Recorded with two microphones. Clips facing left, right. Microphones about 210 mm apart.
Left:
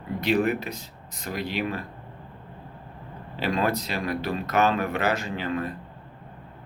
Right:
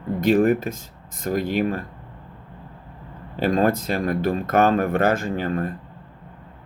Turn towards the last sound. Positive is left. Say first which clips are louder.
# right 4 dB
turn(degrees=-50)  # may be behind; listen again after turning